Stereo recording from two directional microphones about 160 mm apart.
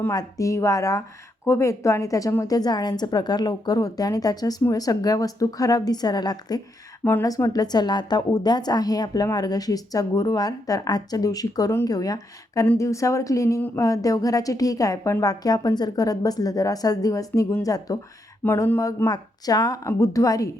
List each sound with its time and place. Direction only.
0.1 s a woman's voice: 20° left (ahead or behind)
7.0 s a woman's voice: 15° left (ahead or behind)